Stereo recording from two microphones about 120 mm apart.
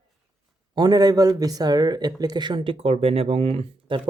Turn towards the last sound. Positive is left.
turn(degrees=-45)  # may be behind; listen again after turning